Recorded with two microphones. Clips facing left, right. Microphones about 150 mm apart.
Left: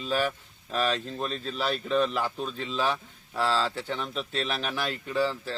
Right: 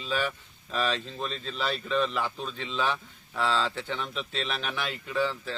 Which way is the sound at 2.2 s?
40° left (ahead or behind).